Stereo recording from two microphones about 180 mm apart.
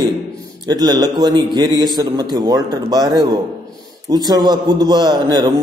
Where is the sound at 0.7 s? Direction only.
20° right (ahead or behind).